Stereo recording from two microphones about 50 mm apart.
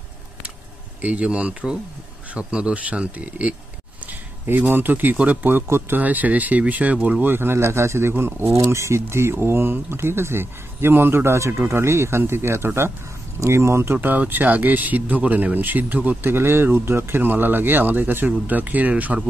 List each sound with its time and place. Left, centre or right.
1.0 s speech: right
4.0 s a sound: right
5.1 s speech: right
5.5 s speech: right
5.9 s speech: right
7.2 s speech: right
8.4 s speech: right
13.4 s speech: right
14.0 s speech: right
16.2 s speech: right